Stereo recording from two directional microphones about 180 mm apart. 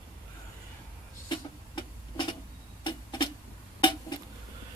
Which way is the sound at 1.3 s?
25° left (ahead or behind).